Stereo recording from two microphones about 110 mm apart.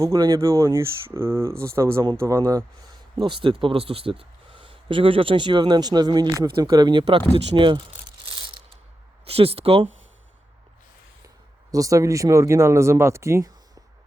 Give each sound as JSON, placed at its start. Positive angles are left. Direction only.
{"t": 0.0, "sound": "speech", "side_deg": -30}
{"t": 3.2, "sound": "speech", "side_deg": -50}
{"t": 8.3, "sound": "mechanisms", "side_deg": -50}
{"t": 9.2, "sound": "speech", "side_deg": -65}
{"t": 11.7, "sound": "speech", "side_deg": -30}